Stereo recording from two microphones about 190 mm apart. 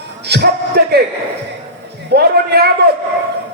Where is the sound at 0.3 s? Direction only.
60° right (ahead or behind).